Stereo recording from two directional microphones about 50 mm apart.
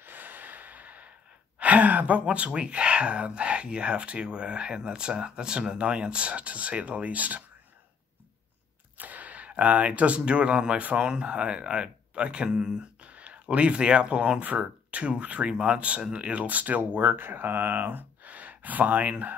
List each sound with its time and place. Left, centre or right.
0.0 s snort: right
1.6 s speech: right
8.9 s speech: right; by 12.7 s centre
13.0 s speech: right